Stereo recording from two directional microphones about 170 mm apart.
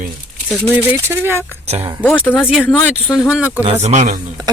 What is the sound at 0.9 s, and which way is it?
Speech, 15° right (ahead or behind).